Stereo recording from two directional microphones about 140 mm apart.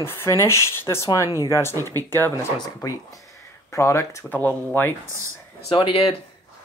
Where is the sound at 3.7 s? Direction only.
20° left (ahead or behind).